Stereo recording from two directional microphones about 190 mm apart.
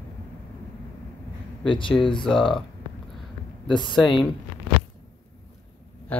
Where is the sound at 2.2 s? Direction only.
Centre (ahead or behind).